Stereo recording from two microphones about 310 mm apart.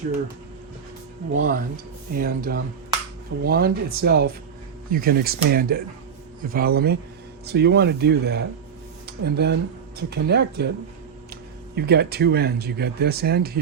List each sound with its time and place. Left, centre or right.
1.3 s speech: right
11.7 s speech: right